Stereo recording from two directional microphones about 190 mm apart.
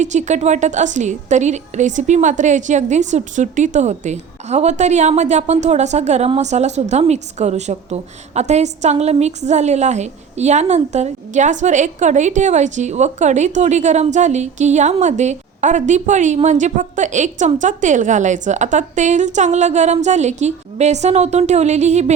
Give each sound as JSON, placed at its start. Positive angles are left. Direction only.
{"t": 0.0, "sound": "a woman's voice", "side_deg": -40}